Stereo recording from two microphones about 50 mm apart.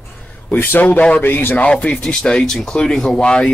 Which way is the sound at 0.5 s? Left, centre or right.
Left.